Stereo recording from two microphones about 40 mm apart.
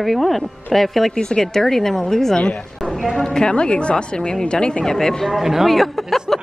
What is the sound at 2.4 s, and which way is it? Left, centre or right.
A woman's voice, left.